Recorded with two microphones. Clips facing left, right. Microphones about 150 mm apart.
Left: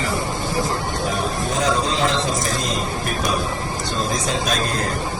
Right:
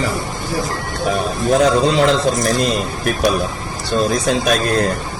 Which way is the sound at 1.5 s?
65° right (ahead or behind).